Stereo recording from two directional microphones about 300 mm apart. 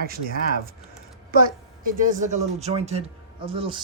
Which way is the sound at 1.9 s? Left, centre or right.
Right.